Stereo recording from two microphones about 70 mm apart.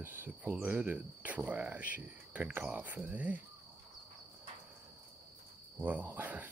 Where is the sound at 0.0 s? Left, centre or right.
Right.